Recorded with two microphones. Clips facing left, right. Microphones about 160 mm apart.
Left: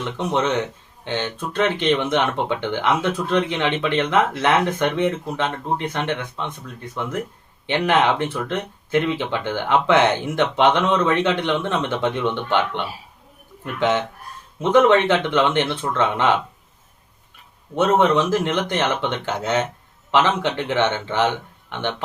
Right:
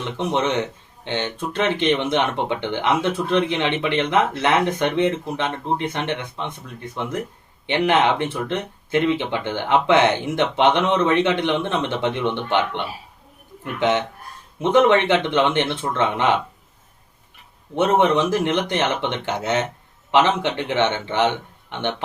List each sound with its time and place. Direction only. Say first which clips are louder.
0.2 s speech: even; 20° right (ahead or behind)
17.7 s speech: even; 20° right (ahead or behind)